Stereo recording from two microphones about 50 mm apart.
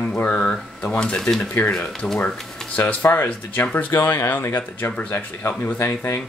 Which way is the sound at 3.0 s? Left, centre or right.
Left.